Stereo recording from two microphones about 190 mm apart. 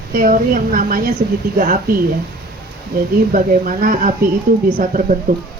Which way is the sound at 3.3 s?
45° right (ahead or behind).